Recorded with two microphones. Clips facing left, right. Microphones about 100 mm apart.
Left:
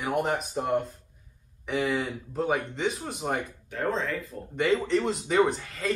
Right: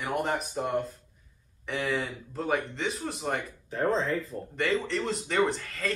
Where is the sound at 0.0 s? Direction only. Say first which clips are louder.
Left 2 dB; centre (ahead or behind).